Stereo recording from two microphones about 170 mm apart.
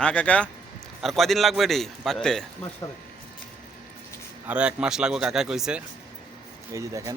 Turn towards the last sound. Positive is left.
turn(degrees=-20)  # may be behind; listen again after turning